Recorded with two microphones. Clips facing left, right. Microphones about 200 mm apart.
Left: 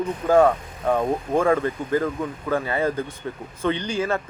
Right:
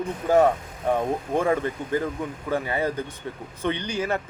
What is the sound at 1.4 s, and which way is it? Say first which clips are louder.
A man's voice: left 3 dB; 20° right (ahead or behind).